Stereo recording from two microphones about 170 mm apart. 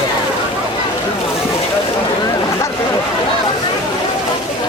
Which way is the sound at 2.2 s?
20° left (ahead or behind).